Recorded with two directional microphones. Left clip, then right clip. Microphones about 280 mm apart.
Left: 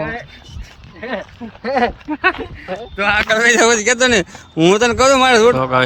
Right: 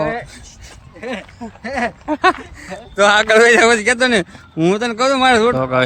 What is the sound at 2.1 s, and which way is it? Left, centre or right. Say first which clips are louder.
Speech: right 2 dB; centre.